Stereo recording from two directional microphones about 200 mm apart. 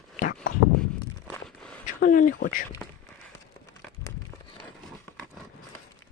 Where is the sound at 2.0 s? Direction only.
40° left (ahead or behind).